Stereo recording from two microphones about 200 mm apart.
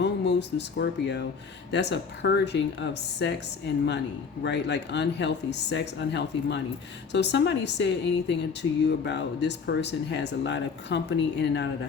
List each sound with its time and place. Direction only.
0.0 s speech: 60° left (ahead or behind)
4.4 s speech: 60° left (ahead or behind)